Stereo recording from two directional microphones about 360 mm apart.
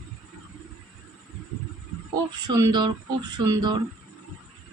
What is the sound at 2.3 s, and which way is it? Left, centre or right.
A man's voice, centre.